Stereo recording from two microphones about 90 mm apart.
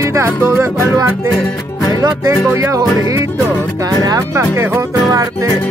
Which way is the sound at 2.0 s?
45° right (ahead or behind).